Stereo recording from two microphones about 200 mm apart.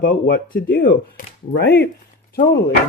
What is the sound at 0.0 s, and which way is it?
Speech, 45° left (ahead or behind).